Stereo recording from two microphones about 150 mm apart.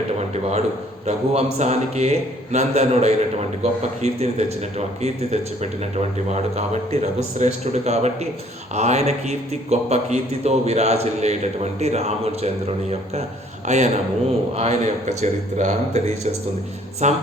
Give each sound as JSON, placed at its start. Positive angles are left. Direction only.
{"t": 0.2, "sound": "a man's voice", "side_deg": -45}
{"t": 6.0, "sound": "a man's voice", "side_deg": -50}